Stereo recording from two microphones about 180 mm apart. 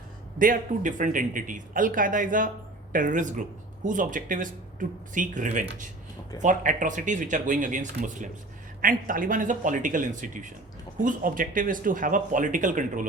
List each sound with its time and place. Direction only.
0.3 s speech: 50° right (ahead or behind)